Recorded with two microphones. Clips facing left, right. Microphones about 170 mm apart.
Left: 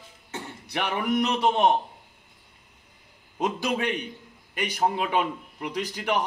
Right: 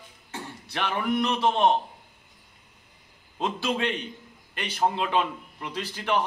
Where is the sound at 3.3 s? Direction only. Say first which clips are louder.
Left 1 dB; 15° left (ahead or behind).